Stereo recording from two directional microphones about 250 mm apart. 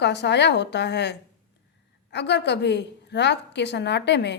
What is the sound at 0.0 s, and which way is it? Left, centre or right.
A woman's voice, left.